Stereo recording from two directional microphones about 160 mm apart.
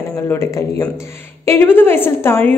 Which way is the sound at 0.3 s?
20° left (ahead or behind).